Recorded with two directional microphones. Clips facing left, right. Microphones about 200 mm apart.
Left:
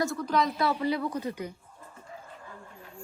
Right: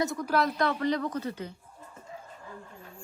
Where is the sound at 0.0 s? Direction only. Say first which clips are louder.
Even; 20° right (ahead or behind).